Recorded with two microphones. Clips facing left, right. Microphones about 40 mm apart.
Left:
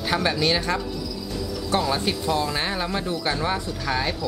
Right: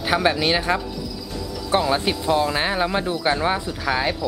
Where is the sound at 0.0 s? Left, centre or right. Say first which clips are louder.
Right 3 dB; centre.